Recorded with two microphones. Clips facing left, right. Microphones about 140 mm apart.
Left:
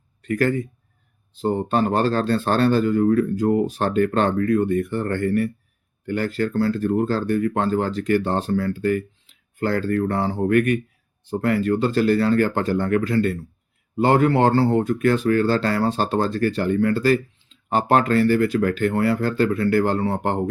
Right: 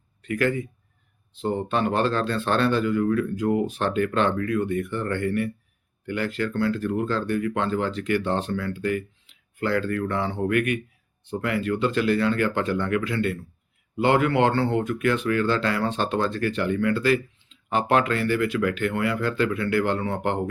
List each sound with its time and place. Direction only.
0.2 s a man's voice: 40° left (ahead or behind)